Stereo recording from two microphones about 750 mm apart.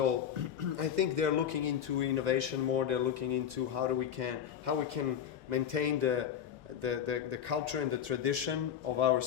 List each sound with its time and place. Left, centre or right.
0.8 s a man's voice: right